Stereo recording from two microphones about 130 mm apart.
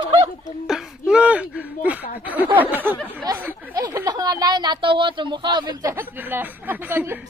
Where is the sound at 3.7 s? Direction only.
25° right (ahead or behind).